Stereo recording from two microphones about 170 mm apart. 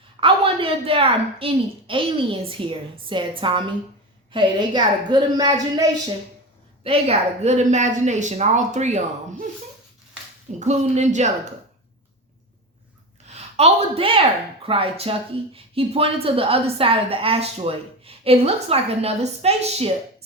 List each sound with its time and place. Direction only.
0.2 s a woman's voice: 30° right (ahead or behind)
6.8 s a woman's voice: 35° right (ahead or behind)
10.6 s a woman's voice: 40° right (ahead or behind)
13.2 s a sound: 40° right (ahead or behind)
14.7 s a woman's voice: 35° right (ahead or behind)